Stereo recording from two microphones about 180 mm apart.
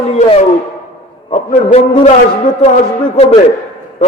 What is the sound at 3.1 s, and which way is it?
Speech, 35° left (ahead or behind).